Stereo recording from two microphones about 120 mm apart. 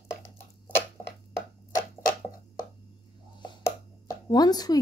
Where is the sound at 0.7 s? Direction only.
15° left (ahead or behind).